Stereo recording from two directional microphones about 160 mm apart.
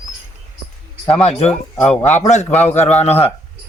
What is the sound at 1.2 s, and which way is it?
Speech, 40° left (ahead or behind).